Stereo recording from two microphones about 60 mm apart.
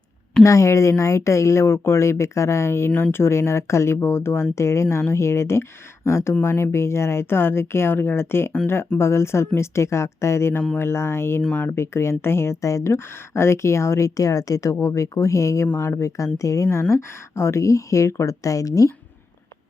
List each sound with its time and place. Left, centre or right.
0.4 s speech: left
12.6 s speech: left
16.9 s speech: left